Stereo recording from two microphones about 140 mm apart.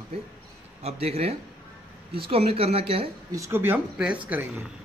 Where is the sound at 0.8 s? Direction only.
50° right (ahead or behind).